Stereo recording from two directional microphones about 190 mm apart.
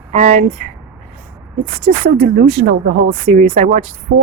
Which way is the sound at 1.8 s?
50° right (ahead or behind).